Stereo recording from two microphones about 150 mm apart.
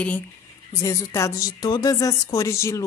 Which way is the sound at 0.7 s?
20° left (ahead or behind).